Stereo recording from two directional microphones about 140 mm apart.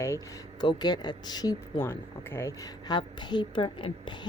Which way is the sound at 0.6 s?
30° left (ahead or behind).